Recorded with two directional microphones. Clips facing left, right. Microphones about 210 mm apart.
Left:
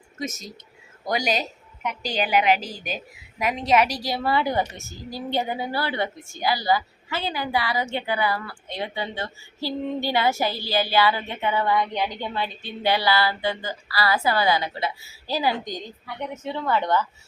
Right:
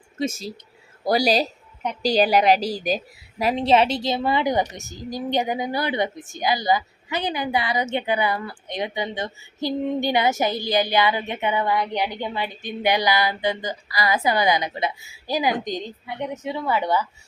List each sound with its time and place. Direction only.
0.2 s a woman's voice: 30° right (ahead or behind); by 17.1 s 10° right (ahead or behind)